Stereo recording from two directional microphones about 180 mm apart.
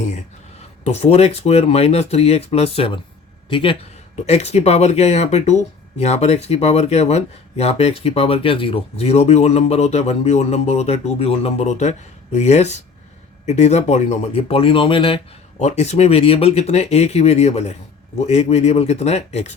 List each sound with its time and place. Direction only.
0.9 s speech: 35° left (ahead or behind)